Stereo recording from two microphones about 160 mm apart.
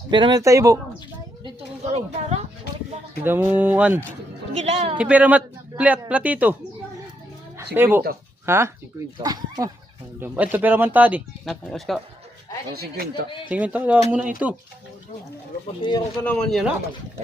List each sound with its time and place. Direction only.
0.1 s speech: 30° right (ahead or behind)
3.2 s speech: 15° right (ahead or behind)
4.5 s a woman's voice: 40° right (ahead or behind)
4.9 s speech: 10° right (ahead or behind)
7.8 s speech: 15° right (ahead or behind)
10.2 s speech: 10° right (ahead or behind)
11.4 s speech: centre (ahead or behind)
12.7 s speech: 80° right
13.5 s speech: 10° right (ahead or behind)
15.8 s speech: 30° left (ahead or behind)
16.2 s speech: 5° left (ahead or behind)